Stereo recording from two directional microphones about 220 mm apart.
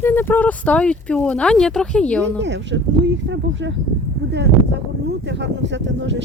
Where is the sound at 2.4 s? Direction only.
55° right (ahead or behind).